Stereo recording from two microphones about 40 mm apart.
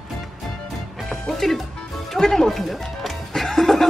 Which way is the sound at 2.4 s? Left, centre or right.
Centre.